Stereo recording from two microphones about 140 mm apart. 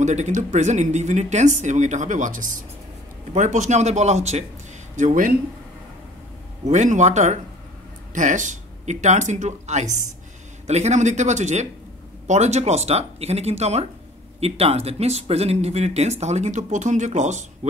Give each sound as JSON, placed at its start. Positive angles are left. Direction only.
{"t": 0.0, "sound": "speech", "side_deg": -55}
{"t": 4.9, "sound": "speech", "side_deg": -70}
{"t": 6.7, "sound": "speech", "side_deg": -60}